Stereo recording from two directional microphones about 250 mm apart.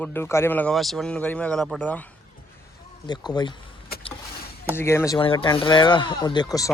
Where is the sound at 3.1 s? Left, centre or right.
Centre.